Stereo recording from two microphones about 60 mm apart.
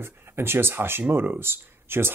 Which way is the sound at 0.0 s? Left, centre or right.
Right.